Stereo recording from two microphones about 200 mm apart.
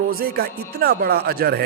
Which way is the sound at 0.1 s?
50° right (ahead or behind).